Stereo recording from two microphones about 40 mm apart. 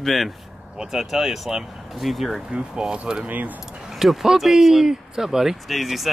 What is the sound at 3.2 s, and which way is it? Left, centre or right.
Speech, right.